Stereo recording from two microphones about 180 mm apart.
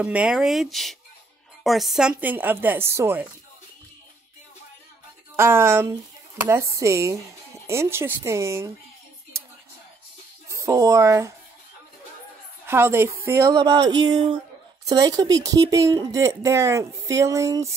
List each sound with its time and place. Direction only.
0.0 s speech: 5° right (ahead or behind)
5.3 s speech: 15° right (ahead or behind)
10.5 s speech: 15° right (ahead or behind)
12.6 s speech: 15° right (ahead or behind)